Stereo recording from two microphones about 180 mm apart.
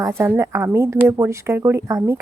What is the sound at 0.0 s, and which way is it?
A woman's voice, 15° right (ahead or behind).